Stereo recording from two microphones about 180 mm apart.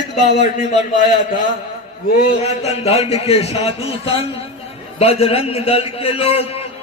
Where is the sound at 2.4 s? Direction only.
35° left (ahead or behind).